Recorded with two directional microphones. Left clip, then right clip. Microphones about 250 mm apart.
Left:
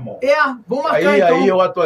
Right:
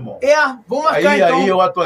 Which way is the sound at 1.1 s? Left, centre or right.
Centre.